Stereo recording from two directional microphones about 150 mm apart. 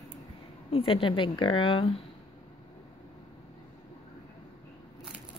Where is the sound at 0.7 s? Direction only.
35° left (ahead or behind).